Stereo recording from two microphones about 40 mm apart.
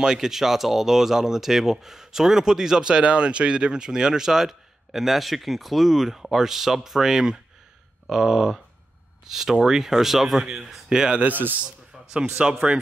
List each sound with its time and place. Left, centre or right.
0.0 s speech: centre
11.2 s a man's voice: right
12.1 s a man's voice: right